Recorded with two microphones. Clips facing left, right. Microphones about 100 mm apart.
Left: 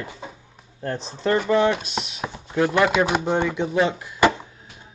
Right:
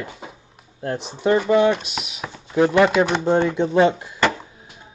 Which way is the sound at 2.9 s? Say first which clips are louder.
Right 3 dB; 15° left (ahead or behind).